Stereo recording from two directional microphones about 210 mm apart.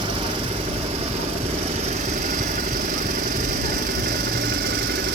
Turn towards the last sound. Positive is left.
turn(degrees=-50)  # may be behind; listen again after turning